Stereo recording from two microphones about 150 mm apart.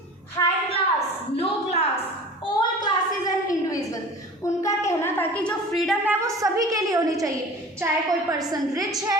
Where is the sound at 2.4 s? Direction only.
25° left (ahead or behind); by 6.0 s centre (ahead or behind).